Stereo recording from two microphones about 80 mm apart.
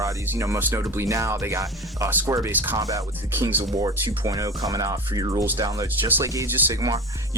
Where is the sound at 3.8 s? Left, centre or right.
Right.